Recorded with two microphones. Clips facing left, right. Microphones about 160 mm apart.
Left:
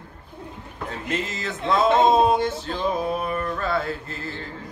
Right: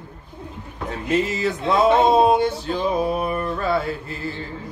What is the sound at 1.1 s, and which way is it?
Music, 10° right (ahead or behind).